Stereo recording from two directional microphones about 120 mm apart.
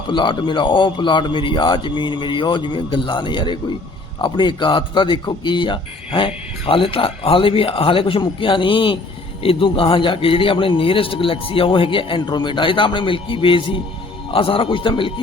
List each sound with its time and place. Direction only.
0.1 s a man's voice: 40° left (ahead or behind)